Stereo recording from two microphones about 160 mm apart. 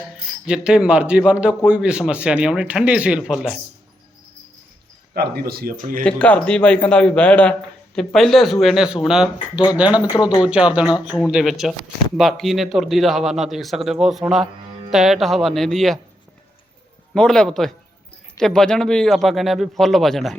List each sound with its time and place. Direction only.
0.4 s a man's voice: 5° right (ahead or behind)
5.1 s speech: 80° right; by 6.0 s 60° right (ahead or behind)
6.0 s a man's voice: 10° left (ahead or behind)
17.2 s a man's voice: 5° left (ahead or behind)